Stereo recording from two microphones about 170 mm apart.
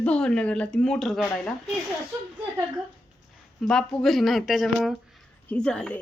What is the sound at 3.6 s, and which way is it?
A woman's voice, 5° left (ahead or behind).